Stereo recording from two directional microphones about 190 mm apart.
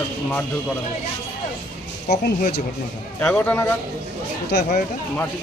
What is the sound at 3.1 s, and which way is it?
Speech, 10° left (ahead or behind).